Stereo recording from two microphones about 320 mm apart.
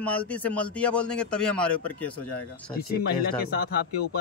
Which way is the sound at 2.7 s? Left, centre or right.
Left.